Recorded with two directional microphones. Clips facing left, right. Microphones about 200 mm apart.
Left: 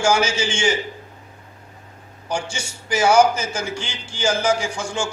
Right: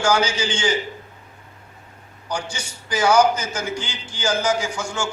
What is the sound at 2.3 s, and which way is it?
A man's voice, 25° left (ahead or behind).